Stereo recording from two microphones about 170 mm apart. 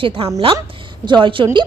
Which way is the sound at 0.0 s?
30° right (ahead or behind).